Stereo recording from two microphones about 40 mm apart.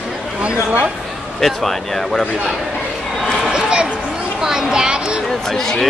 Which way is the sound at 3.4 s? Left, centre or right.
Centre.